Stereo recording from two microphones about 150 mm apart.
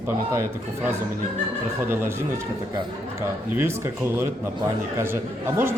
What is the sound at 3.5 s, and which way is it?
Speech, 15° right (ahead or behind).